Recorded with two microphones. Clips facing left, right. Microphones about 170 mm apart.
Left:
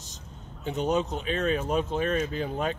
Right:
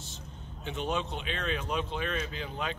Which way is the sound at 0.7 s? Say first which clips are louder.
Left 6 dB; 40° left (ahead or behind).